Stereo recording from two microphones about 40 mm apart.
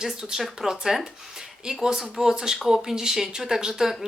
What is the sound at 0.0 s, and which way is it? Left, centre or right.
A woman's voice, centre.